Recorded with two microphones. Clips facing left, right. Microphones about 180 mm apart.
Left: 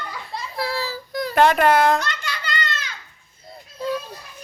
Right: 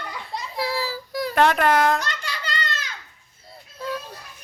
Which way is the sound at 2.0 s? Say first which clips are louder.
Left 2 dB; 35° right (ahead or behind).